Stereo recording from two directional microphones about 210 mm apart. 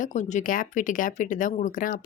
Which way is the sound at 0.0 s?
35° left (ahead or behind).